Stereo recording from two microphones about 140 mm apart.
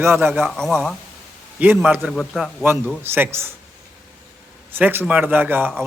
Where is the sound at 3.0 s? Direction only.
15° right (ahead or behind).